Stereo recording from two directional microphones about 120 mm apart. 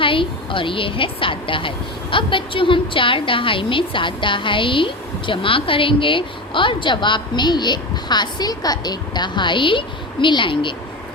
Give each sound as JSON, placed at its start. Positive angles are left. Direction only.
{"t": 0.0, "sound": "a woman's voice", "side_deg": 45}